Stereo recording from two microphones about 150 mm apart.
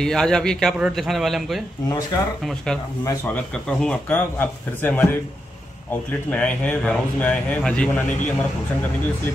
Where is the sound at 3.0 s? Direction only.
20° left (ahead or behind).